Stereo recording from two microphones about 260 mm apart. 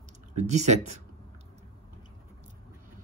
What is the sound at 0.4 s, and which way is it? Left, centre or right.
Speech, right.